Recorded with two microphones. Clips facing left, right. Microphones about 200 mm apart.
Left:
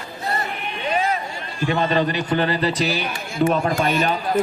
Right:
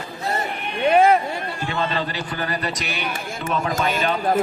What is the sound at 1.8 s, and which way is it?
A man's voice, 20° left (ahead or behind).